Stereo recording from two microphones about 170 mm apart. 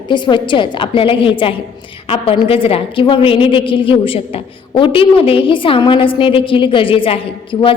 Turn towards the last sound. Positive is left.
turn(degrees=30)  # may be behind; listen again after turning